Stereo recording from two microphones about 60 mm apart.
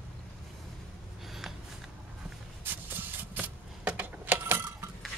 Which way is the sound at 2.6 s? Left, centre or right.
Right.